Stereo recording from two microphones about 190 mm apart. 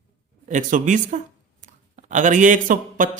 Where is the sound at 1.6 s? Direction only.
40° right (ahead or behind).